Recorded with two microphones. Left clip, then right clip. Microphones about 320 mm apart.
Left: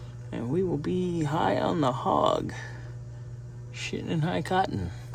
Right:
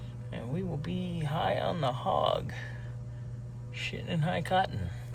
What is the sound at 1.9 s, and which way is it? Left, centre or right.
Speech, left.